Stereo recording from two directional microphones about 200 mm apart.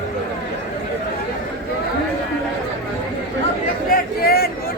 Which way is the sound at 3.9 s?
50° left (ahead or behind).